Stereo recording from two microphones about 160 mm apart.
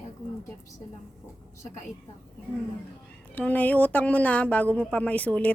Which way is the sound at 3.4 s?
10° left (ahead or behind).